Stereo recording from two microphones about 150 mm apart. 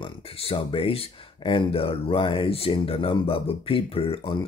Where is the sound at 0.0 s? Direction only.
40° left (ahead or behind).